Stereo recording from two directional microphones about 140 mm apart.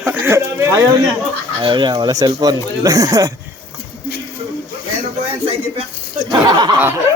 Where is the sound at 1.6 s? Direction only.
30° right (ahead or behind).